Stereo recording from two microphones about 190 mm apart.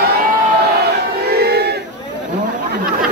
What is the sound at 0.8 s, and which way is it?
Battle cry, 55° right (ahead or behind).